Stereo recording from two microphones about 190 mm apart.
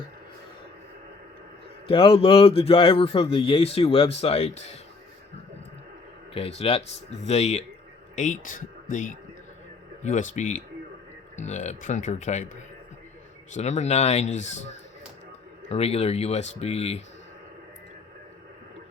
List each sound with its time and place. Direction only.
1.9 s a man's voice: 30° left (ahead or behind)
6.3 s a man's voice: 30° left (ahead or behind)
13.5 s a man's voice: 35° left (ahead or behind)